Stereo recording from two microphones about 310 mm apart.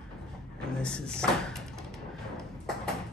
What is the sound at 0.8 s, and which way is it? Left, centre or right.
Speech, centre.